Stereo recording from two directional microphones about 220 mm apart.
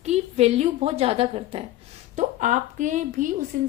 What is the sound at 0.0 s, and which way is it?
A woman's voice, 30° right (ahead or behind).